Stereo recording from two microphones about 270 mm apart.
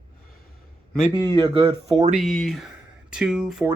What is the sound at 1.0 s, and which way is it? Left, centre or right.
Speech, centre.